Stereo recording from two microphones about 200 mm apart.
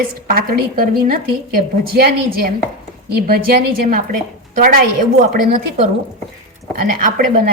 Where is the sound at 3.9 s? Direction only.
45° right (ahead or behind).